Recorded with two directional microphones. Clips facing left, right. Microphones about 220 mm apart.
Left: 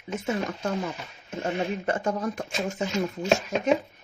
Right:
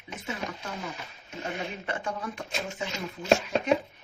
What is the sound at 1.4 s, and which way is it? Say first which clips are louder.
Speech: left 7 dB; 40° left (ahead or behind).